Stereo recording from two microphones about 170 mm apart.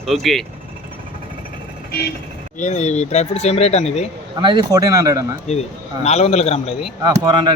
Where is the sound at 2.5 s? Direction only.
45° left (ahead or behind).